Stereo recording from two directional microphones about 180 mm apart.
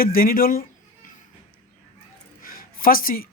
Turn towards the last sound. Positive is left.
turn(degrees=50)  # may be behind; listen again after turning